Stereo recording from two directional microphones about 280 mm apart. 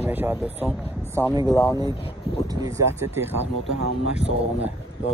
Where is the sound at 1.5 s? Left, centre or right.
Centre.